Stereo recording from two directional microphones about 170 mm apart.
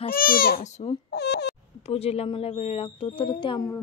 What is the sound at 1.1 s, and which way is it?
Baby cry, 80° left.